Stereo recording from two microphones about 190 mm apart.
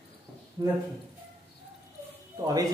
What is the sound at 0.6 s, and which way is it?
Speech, 25° right (ahead or behind).